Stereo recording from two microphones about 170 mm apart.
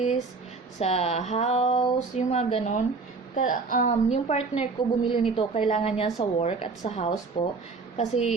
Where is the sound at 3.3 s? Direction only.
50° left (ahead or behind).